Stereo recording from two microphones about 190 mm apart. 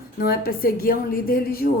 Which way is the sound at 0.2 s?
50° left (ahead or behind).